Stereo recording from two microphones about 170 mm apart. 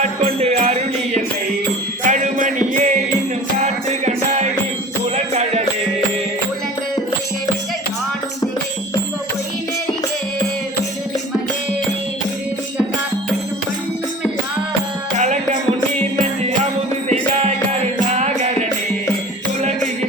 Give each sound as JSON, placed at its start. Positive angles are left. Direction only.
{"t": 0.0, "sound": "music", "side_deg": -40}
{"t": 2.0, "sound": "music", "side_deg": -50}
{"t": 17.1, "sound": "music", "side_deg": -40}